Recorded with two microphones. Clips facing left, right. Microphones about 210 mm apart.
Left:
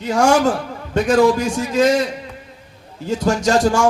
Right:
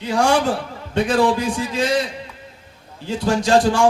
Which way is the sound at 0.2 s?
45° left (ahead or behind).